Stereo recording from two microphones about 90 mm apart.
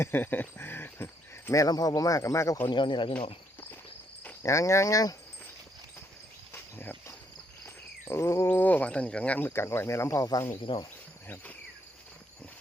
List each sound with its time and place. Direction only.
0.0 s speech: 25° left (ahead or behind)
1.6 s speech: 45° left (ahead or behind)
2.6 s speech: 60° left (ahead or behind)
4.4 s speech: 35° left (ahead or behind)
6.5 s cricket: 25° left (ahead or behind)
7.6 s speech: 30° left (ahead or behind)
9.5 s speech: 30° left (ahead or behind)
10.6 s speech: 65° left (ahead or behind)